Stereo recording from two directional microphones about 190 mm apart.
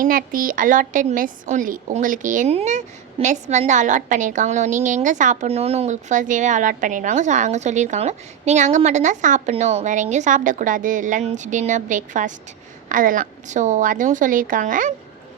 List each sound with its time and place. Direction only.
0.0 s a woman's voice: 45° right (ahead or behind)